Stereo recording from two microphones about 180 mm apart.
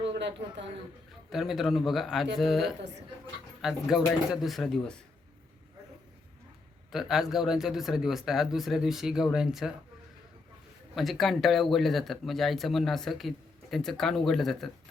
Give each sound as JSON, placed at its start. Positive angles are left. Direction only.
{"t": 0.1, "sound": "a man's voice", "side_deg": -75}
{"t": 1.3, "sound": "speech", "side_deg": 0}
{"t": 6.9, "sound": "speech", "side_deg": 0}
{"t": 10.9, "sound": "speech", "side_deg": 0}